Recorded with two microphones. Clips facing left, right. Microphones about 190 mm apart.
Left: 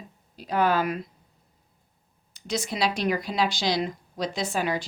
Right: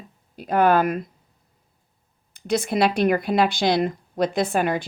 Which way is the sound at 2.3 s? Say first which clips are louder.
Right 7 dB; 55° right (ahead or behind).